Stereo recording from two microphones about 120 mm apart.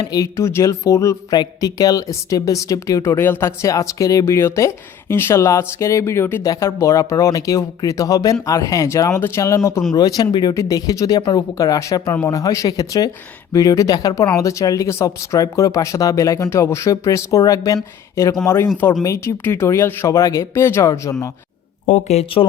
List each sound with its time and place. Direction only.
0.0 s speech: 30° left (ahead or behind)
9.9 s speech: 35° left (ahead or behind)
21.8 s speech: 80° left; by 22.4 s 60° left (ahead or behind)